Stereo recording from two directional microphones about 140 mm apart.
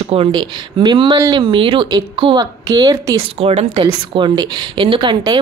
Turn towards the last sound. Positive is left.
turn(degrees=-35)  # may be behind; listen again after turning